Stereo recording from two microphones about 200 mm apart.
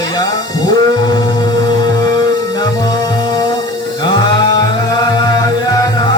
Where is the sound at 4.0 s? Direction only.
25° left (ahead or behind).